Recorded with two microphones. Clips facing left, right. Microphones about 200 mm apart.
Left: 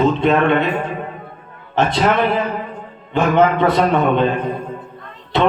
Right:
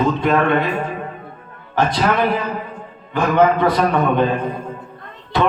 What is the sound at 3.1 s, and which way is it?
Speech, 25° left (ahead or behind).